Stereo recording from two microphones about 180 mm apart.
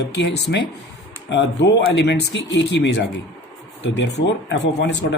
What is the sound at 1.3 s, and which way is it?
Speech, 75° left (ahead or behind).